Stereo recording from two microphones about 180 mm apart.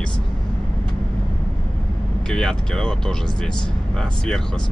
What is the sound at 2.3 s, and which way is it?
Speech, 5° left (ahead or behind).